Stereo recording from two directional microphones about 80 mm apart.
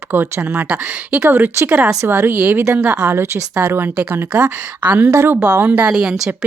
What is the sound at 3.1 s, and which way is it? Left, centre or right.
Speech, right.